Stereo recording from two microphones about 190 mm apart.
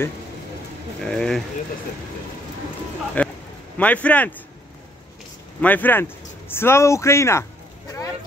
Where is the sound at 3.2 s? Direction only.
10° left (ahead or behind).